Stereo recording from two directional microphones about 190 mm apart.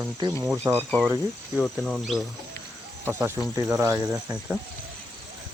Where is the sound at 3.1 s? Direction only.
15° right (ahead or behind).